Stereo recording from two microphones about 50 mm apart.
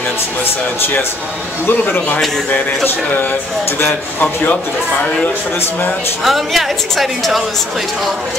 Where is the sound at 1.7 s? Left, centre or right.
Left.